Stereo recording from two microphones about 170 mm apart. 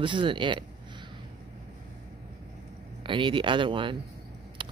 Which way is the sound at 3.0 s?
30° right (ahead or behind).